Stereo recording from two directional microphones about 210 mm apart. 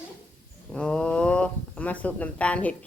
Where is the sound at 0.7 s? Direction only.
5° left (ahead or behind).